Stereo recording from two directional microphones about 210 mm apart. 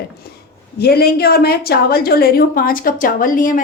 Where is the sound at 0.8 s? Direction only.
50° left (ahead or behind).